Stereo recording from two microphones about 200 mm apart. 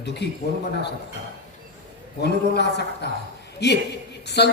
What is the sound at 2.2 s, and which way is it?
A man's voice, 55° left (ahead or behind).